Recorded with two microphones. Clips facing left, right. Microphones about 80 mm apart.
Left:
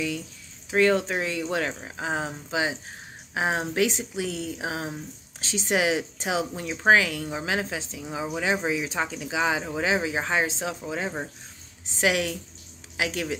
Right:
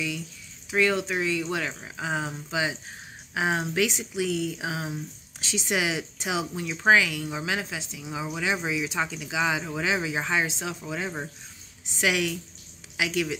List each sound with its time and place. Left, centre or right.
0.7 s speech: left